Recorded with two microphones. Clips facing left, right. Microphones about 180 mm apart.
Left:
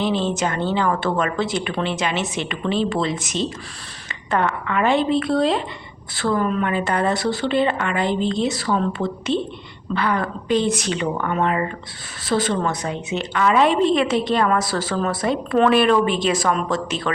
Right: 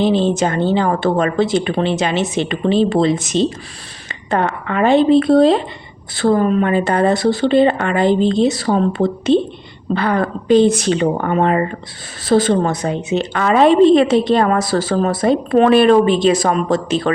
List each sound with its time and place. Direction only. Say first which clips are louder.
0.0 s a woman's voice: right 6 dB; 30° right (ahead or behind)
16.6 s a woman's voice: right 7 dB; 35° right (ahead or behind)